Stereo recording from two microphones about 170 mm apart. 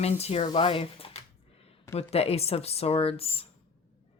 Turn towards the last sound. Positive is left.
turn(degrees=35)  # may be behind; listen again after turning